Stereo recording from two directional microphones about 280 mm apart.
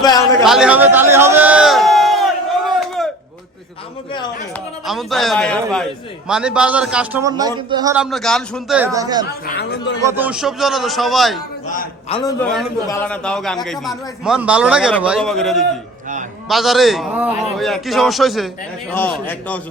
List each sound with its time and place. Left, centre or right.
0.0 s a sound: centre
0.4 s a sound: centre
4.9 s a man's voice: centre
7.9 s a man's voice: centre
9.5 s speech: left
10.1 s a man's voice: centre
11.7 s a man's voice: left
12.4 s a man's voice: centre